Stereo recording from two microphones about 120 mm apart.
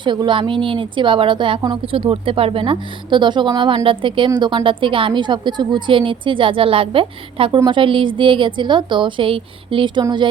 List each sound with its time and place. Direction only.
0.0 s a woman's voice: 40° right (ahead or behind)